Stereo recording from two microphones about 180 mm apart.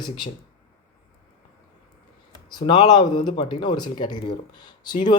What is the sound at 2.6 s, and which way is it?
Speech, 25° left (ahead or behind).